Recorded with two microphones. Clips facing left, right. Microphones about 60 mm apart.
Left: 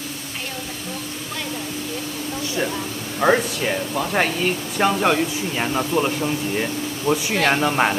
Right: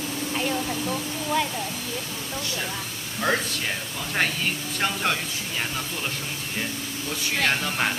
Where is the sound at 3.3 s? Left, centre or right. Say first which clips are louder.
Left 7 dB; centre.